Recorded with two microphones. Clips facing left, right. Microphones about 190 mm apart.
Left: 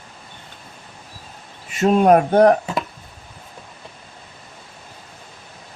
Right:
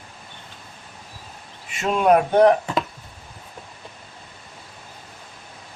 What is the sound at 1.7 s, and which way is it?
Speech, 40° left (ahead or behind).